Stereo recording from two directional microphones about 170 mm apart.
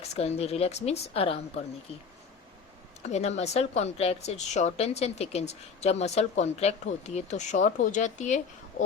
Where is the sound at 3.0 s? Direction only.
40° left (ahead or behind).